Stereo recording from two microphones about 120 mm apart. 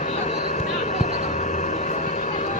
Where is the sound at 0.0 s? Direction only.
85° left.